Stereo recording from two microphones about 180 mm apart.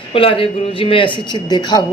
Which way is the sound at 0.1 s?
30° left (ahead or behind).